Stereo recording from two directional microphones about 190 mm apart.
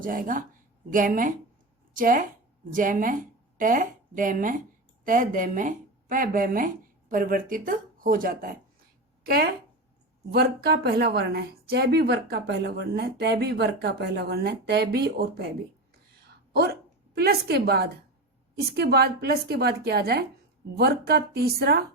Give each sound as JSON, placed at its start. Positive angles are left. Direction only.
{"t": 0.0, "sound": "speech", "side_deg": -45}
{"t": 16.5, "sound": "speech", "side_deg": -55}